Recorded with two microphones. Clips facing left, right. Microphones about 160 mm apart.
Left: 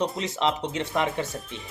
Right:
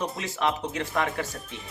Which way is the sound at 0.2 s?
20° left (ahead or behind).